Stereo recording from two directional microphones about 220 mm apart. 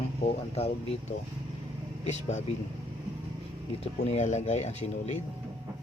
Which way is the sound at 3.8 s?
25° left (ahead or behind).